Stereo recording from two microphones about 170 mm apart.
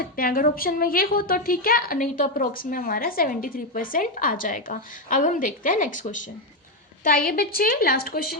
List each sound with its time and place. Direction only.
0.0 s a woman's voice: 60° left (ahead or behind)